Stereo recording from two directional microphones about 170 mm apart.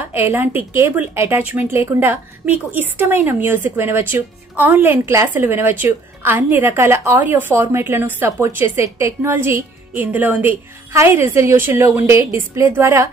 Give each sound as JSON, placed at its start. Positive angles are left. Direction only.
{"t": 0.1, "sound": "a woman's voice", "side_deg": -10}